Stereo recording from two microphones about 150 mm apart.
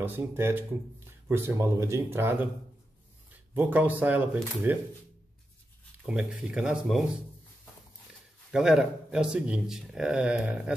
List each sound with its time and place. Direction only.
0.0 s speech: 15° right (ahead or behind)
3.5 s speech: 10° right (ahead or behind)
6.0 s speech: 5° right (ahead or behind)
8.5 s speech: 5° right (ahead or behind)